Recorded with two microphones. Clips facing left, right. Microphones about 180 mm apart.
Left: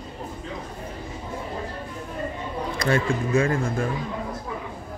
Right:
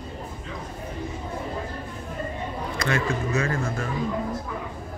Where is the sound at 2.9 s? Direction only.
30° left (ahead or behind).